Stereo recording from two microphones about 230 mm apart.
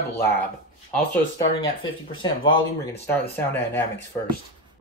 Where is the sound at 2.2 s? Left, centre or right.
Left.